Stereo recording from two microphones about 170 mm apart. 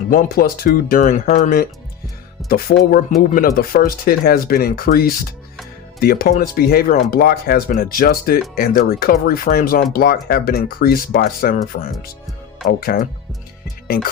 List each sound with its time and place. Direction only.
0.1 s speech: 55° left (ahead or behind)